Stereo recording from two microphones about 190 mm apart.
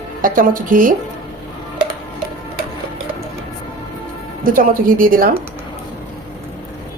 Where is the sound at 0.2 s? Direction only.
45° right (ahead or behind).